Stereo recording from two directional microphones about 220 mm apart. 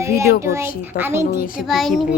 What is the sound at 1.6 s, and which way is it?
Speech, centre (ahead or behind).